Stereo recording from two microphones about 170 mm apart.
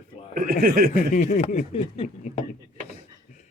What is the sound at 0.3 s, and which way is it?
Speech, 55° right (ahead or behind).